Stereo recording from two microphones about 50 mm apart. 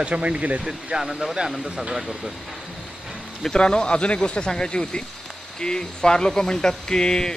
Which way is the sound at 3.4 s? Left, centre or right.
Centre.